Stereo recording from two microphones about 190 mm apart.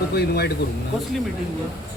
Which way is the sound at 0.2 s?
60° left (ahead or behind).